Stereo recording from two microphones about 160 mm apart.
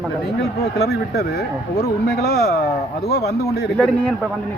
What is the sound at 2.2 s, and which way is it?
Speech, 90° left.